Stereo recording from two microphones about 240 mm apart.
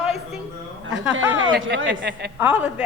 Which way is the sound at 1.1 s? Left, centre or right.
Right.